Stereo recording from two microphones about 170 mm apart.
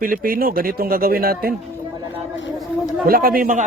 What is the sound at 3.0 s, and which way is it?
Speech, 60° right (ahead or behind).